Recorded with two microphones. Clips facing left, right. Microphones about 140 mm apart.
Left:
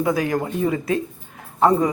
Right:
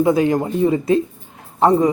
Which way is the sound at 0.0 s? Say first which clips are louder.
Right 5 dB; 25° right (ahead or behind).